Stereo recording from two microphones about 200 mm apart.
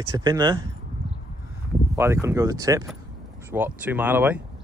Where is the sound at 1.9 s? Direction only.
15° right (ahead or behind).